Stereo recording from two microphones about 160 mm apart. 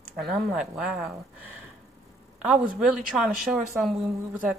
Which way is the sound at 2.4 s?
5° right (ahead or behind).